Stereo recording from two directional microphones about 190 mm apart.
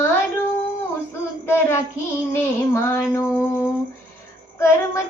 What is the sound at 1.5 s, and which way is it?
Child singing, 15° left (ahead or behind).